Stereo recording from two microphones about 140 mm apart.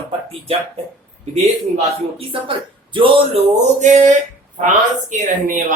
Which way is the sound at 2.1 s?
40° right (ahead or behind).